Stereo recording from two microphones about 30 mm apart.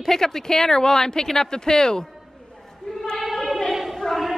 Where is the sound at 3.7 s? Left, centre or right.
Centre.